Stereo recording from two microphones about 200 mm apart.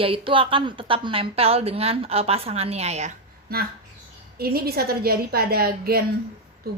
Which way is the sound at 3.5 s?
50° right (ahead or behind).